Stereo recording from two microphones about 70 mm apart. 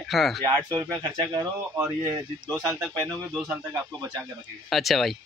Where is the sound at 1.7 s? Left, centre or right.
Right.